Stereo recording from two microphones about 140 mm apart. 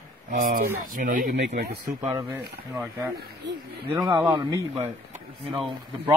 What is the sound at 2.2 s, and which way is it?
Speech, 20° right (ahead or behind).